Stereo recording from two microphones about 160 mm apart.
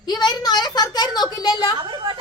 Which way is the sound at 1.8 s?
30° right (ahead or behind).